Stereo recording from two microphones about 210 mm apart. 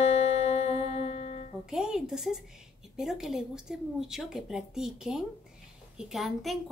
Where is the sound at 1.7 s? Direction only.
Centre (ahead or behind).